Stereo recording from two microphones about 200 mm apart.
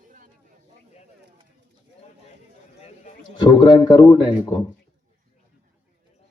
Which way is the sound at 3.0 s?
25° left (ahead or behind).